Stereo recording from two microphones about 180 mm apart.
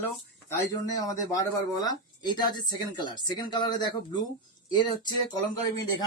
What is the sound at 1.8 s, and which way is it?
Speech, 25° left (ahead or behind).